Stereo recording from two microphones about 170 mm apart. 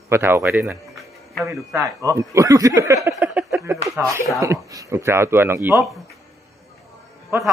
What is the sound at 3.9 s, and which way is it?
Speech, 15° right (ahead or behind).